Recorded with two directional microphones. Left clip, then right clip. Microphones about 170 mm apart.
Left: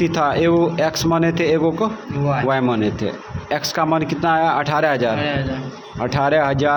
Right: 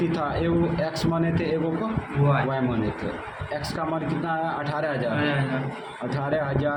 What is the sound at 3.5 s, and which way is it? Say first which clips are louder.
A man's voice: left 10 dB; 45° left (ahead or behind).